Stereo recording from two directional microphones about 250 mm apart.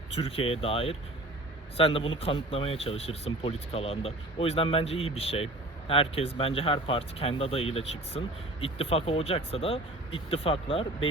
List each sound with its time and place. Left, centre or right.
0.1 s speech: left